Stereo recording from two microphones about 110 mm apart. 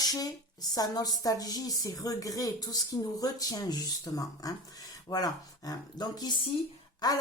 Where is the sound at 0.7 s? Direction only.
35° left (ahead or behind).